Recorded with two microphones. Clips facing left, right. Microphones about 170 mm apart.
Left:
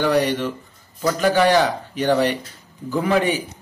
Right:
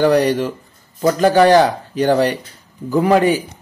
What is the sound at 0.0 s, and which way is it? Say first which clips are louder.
A man's voice: right 5 dB; 40° right (ahead or behind).